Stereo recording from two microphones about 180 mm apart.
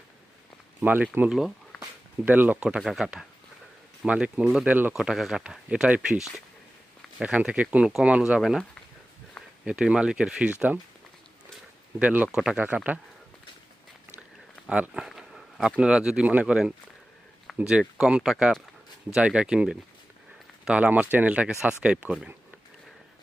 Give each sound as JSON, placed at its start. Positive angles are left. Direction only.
{"t": 0.8, "sound": "speech", "side_deg": -10}
{"t": 9.6, "sound": "speech", "side_deg": -5}
{"t": 11.9, "sound": "speech", "side_deg": -5}
{"t": 14.7, "sound": "speech", "side_deg": -5}